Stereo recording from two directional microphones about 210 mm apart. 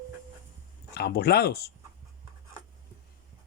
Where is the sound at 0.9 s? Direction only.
50° left (ahead or behind).